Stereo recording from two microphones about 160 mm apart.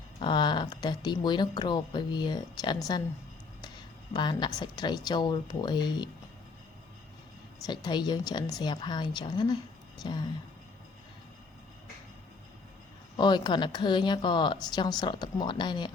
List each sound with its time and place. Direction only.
0.2 s speech: 30° left (ahead or behind)
4.1 s speech: 30° left (ahead or behind)
7.6 s speech: 25° left (ahead or behind)
13.1 s speech: 30° left (ahead or behind)